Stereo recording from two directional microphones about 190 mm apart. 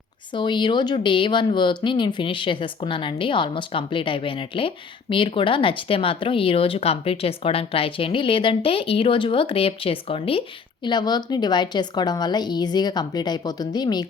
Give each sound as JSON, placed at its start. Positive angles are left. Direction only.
{"t": 0.3, "sound": "speech", "side_deg": 25}